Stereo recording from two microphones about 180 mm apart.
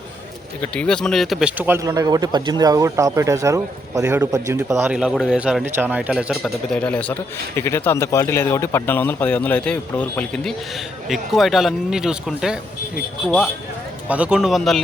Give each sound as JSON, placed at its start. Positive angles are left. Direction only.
{"t": 0.6, "sound": "speech", "side_deg": 5}
{"t": 4.9, "sound": "speech", "side_deg": -5}